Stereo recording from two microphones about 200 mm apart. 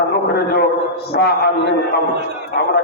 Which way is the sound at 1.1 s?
55° left (ahead or behind).